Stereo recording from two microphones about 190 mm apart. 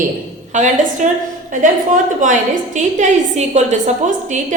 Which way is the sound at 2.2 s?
45° right (ahead or behind).